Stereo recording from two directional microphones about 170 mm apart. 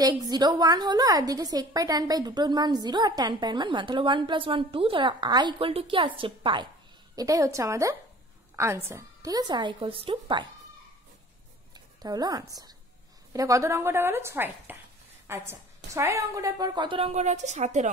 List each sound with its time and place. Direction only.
0.0 s a woman's voice: 20° right (ahead or behind)
11.7 s a woman's voice: 25° right (ahead or behind); by 17.8 s 45° right (ahead or behind)